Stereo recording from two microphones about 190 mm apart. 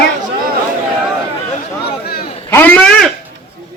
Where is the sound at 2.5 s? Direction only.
10° left (ahead or behind).